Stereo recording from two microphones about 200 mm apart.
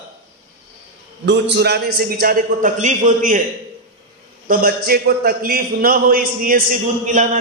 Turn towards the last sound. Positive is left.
turn(degrees=-40)  # may be behind; listen again after turning